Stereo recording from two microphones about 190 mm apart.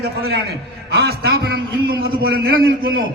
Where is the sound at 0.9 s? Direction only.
60° right (ahead or behind).